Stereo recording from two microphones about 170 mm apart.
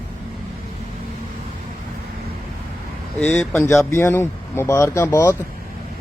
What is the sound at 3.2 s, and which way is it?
Speech, 5° left (ahead or behind).